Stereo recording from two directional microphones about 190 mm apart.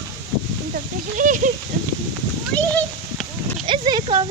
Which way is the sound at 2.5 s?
10° left (ahead or behind).